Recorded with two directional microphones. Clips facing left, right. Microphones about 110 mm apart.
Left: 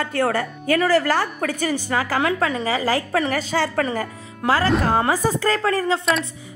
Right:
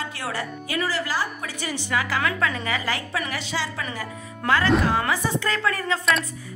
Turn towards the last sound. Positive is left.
turn(degrees=35)  # may be behind; listen again after turning